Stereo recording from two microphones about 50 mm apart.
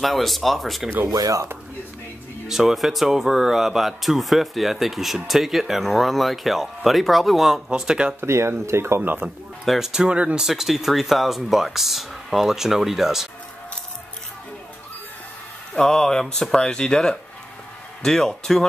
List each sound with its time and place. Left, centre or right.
0.0 s speech: centre
2.4 s speech: centre
7.7 s speech: centre
8.2 s speech: right
9.2 s speech: right
9.9 s speech: right
10.4 s speech: centre
15.7 s speech: centre